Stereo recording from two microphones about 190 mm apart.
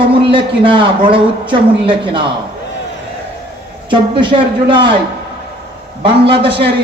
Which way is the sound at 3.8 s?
25° right (ahead or behind).